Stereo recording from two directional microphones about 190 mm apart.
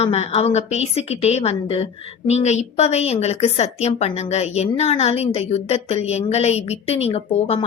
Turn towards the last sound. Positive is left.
turn(degrees=30)  # may be behind; listen again after turning